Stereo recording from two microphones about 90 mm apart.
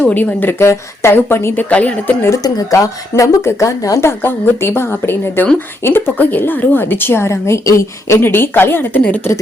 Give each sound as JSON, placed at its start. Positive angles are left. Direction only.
{"t": 0.0, "sound": "a woman's voice", "side_deg": 20}
{"t": 1.7, "sound": "a woman's voice", "side_deg": 15}
{"t": 2.3, "sound": "speech", "side_deg": 40}
{"t": 4.2, "sound": "a woman's voice", "side_deg": 25}